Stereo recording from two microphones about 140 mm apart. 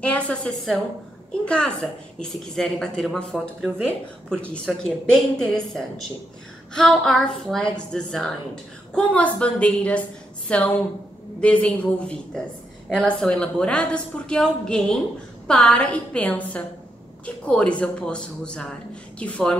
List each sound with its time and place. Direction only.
0.0 s a woman's voice: 5° left (ahead or behind)